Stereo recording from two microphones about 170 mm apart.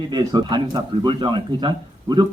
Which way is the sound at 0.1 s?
25° right (ahead or behind).